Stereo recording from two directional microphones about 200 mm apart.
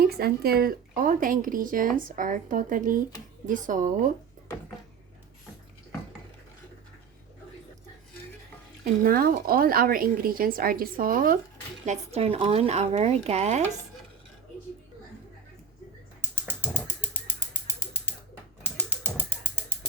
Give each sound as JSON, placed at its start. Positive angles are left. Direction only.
{"t": 0.0, "sound": "speech", "side_deg": -50}
{"t": 8.8, "sound": "speech", "side_deg": -50}
{"t": 11.9, "sound": "speech", "side_deg": -30}
{"t": 16.5, "sound": "a sound", "side_deg": 10}